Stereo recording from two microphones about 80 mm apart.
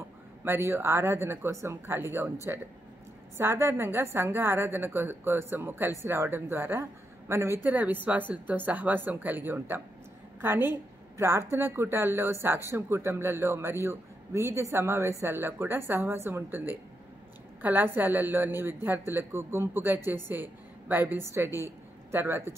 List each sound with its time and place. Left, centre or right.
0.4 s speech: right
3.3 s a woman's voice: right
7.6 s a woman's voice: right